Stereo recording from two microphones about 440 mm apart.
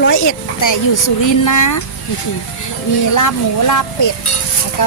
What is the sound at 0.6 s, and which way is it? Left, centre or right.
A child's voice, left.